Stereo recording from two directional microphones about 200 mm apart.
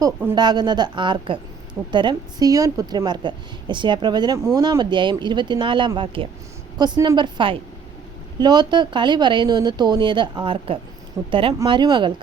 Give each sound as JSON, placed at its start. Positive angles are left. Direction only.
{"t": 0.0, "sound": "a woman's voice", "side_deg": -15}